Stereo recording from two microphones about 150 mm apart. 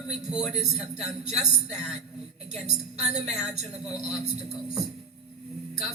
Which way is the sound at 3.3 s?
Centre (ahead or behind).